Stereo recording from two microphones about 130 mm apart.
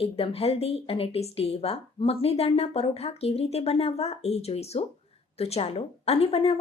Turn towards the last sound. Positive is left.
turn(degrees=50)  # may be behind; listen again after turning